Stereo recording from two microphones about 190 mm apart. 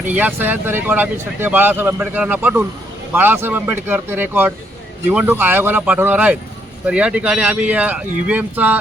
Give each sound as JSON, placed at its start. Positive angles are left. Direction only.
{"t": 0.1, "sound": "speech", "side_deg": -10}